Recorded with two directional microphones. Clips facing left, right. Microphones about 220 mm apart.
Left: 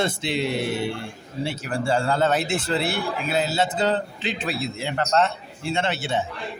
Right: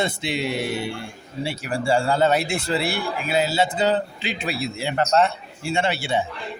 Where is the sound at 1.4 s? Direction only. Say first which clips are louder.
Right 1 dB; 10° right (ahead or behind).